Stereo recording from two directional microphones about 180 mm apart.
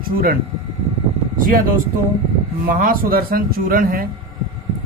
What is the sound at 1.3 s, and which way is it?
Speech, 50° right (ahead or behind).